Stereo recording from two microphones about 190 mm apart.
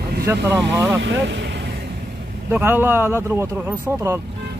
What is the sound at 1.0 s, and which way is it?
Speech, 70° right (ahead or behind).